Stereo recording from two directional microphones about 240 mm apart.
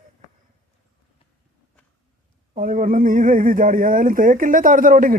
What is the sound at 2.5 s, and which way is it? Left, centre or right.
Speech, right.